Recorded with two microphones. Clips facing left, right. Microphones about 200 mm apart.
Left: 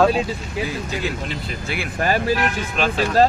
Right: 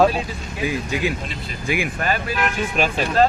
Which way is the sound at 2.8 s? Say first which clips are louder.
Even; 10° right (ahead or behind).